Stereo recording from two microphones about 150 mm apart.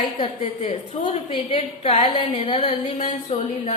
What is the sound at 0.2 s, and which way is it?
A woman's voice, 40° left (ahead or behind).